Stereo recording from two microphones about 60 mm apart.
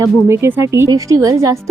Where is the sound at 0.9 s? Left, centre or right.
Right.